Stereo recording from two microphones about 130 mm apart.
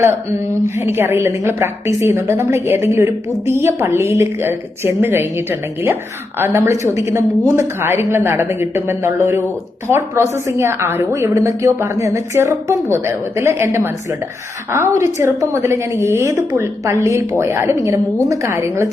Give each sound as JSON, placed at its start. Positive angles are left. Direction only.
{"t": 0.8, "sound": "a woman's voice", "side_deg": -20}